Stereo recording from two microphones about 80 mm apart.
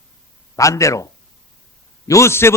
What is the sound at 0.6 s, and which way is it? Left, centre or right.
A man's voice, left.